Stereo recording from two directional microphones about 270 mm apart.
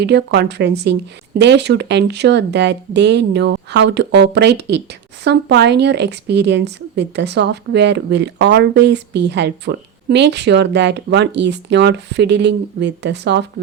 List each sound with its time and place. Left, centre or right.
0.0 s a woman's voice: right